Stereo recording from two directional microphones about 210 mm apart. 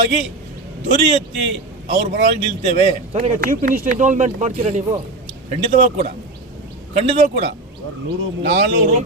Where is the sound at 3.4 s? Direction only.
45° right (ahead or behind).